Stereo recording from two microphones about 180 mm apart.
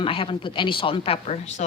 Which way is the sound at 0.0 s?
30° left (ahead or behind).